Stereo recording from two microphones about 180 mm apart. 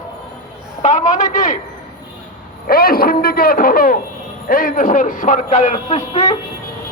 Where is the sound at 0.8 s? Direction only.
45° left (ahead or behind).